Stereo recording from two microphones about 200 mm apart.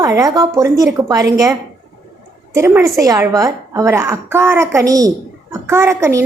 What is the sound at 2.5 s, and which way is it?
A woman's voice, 15° right (ahead or behind).